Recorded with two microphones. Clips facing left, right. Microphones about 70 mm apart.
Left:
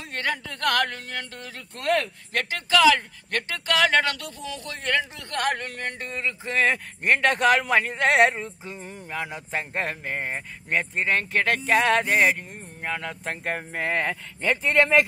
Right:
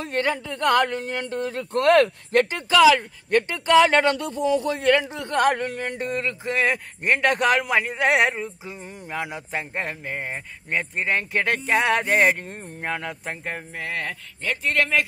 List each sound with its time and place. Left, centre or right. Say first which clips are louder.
0.1 s speech: right 3 dB; right
1.7 s speech: right 8 dB; right
2.7 s speech: right 3 dB; centre
5.9 s speech: right 4 dB; right
7.2 s speech: even; centre
9.5 s speech: even; centre
11.0 s speech: right 1 dB; centre
11.7 s speech: left 1 dB; centre
12.1 s speech: right 2 dB; right
13.1 s speech: left 2 dB; centre
13.6 s speech: left 4 dB; left